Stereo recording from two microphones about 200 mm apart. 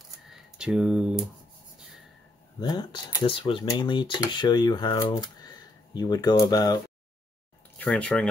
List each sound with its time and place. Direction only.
0.3 s speech: centre (ahead or behind)
2.6 s speech: 20° left (ahead or behind)
7.7 s speech: 5° left (ahead or behind)